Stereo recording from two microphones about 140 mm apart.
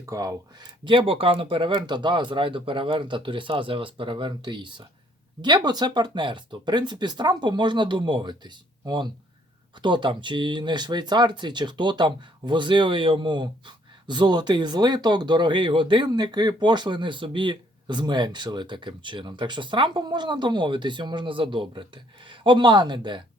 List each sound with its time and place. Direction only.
0.0 s speech: 25° right (ahead or behind)